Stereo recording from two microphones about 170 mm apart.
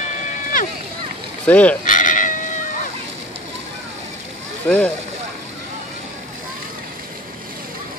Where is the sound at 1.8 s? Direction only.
50° left (ahead or behind).